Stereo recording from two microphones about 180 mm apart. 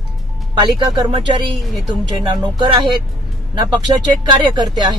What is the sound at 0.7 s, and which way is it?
Speech, 25° right (ahead or behind).